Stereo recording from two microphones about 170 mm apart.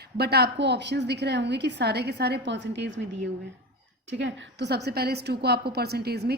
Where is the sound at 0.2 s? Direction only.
70° right (ahead or behind); by 3.0 s 90° right.